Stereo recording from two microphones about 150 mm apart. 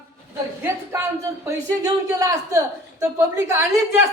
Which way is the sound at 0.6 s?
20° right (ahead or behind).